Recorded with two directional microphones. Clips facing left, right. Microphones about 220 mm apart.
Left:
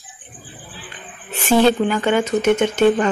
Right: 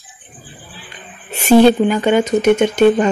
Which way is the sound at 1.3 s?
15° right (ahead or behind).